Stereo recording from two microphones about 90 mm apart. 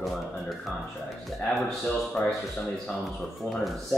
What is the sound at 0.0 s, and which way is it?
Music, centre (ahead or behind).